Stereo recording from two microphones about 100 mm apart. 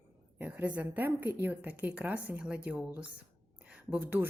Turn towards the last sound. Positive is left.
turn(degrees=-20)  # may be behind; listen again after turning